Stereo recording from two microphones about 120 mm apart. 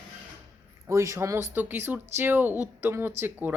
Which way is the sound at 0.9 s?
25° right (ahead or behind).